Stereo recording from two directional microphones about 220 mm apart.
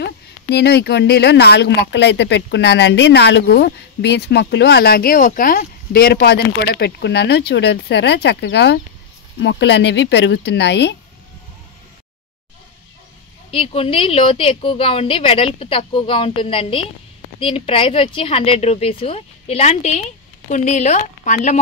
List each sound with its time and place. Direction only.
0.0 s speech: 50° left (ahead or behind)
13.5 s a woman's voice: 25° left (ahead or behind)